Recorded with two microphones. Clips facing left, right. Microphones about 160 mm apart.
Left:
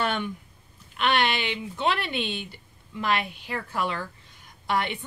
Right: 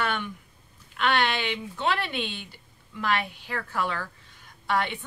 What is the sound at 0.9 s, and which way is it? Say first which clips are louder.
A woman's voice: left 1 dB; 20° left (ahead or behind).